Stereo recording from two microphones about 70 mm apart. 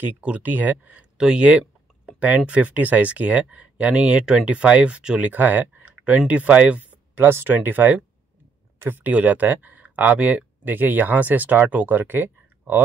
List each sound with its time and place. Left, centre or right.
0.0 s speech: right
1.1 s speech: centre
5.3 s speech: right
7.2 s speech: right
8.7 s a sound: right
9.0 s speech: right